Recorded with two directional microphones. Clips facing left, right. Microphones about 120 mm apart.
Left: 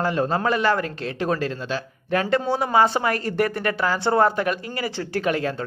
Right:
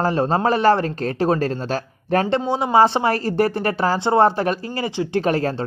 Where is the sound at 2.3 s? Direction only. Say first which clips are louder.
Right 2 dB; 20° right (ahead or behind).